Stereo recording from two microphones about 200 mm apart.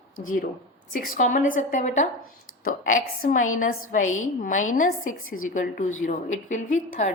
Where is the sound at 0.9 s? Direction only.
40° left (ahead or behind).